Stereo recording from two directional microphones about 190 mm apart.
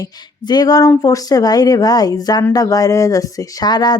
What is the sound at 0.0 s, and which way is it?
A woman's voice, 20° left (ahead or behind).